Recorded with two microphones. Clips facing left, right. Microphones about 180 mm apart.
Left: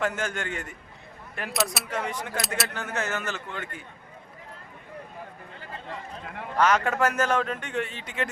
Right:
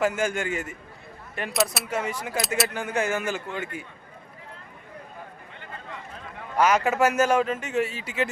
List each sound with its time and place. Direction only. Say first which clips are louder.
0.0 s a man's voice: right 4 dB; 10° right (ahead or behind)
2.7 s a man's voice: right 4 dB; 10° right (ahead or behind)
6.6 s a man's voice: right 2 dB; 10° right (ahead or behind)